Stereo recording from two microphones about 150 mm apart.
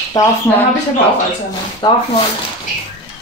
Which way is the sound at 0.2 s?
25° left (ahead or behind).